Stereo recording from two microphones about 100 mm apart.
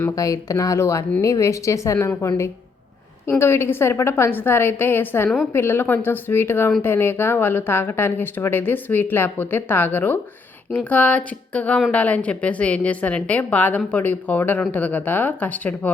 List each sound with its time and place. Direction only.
0.2 s a woman's voice: 35° left (ahead or behind); by 15.9 s 15° left (ahead or behind)